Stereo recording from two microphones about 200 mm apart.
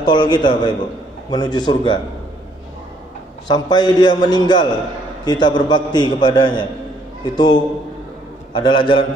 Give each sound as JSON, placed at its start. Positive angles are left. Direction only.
{"t": 0.0, "sound": "a man's voice", "side_deg": 20}
{"t": 3.4, "sound": "a man's voice", "side_deg": 20}